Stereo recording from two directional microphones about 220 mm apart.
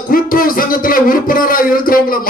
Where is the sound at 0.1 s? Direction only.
40° left (ahead or behind).